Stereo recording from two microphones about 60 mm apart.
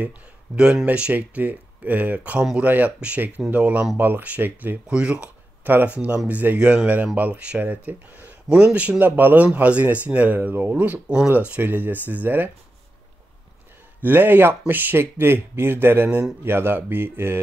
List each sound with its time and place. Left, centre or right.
0.8 s speech: right
4.8 s speech: centre
5.6 s speech: right
14.0 s speech: right